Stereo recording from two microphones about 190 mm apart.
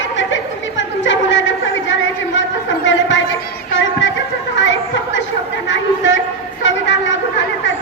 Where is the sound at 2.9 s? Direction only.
75° left (ahead or behind).